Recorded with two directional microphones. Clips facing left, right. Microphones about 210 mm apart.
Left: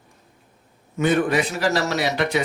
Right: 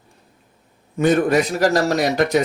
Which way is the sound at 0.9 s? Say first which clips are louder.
Right 4 dB; 40° right (ahead or behind).